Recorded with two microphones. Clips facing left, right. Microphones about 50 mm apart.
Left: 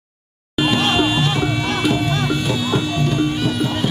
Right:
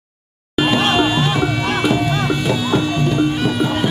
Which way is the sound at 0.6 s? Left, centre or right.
Centre.